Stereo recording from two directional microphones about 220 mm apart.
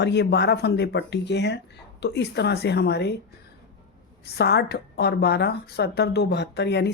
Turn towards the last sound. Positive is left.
turn(degrees=50)  # may be behind; listen again after turning